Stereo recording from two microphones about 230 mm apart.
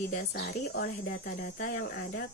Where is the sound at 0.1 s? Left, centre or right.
Left.